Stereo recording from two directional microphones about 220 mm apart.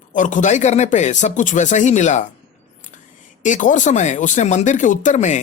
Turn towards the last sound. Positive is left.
turn(degrees=35)  # may be behind; listen again after turning